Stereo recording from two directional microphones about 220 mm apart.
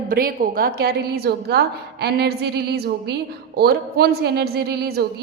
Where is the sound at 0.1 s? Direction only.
40° right (ahead or behind).